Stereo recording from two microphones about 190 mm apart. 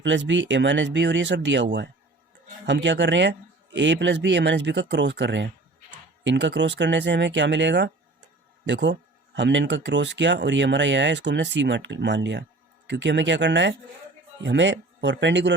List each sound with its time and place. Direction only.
0.0 s speech: 75° right (ahead or behind)